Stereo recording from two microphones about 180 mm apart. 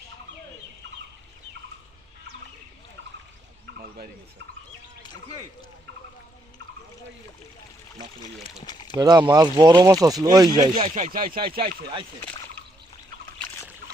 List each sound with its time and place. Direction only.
8.6 s speech: 25° left (ahead or behind)
9.0 s speech: 25° right (ahead or behind)
10.9 s speech: 45° right (ahead or behind)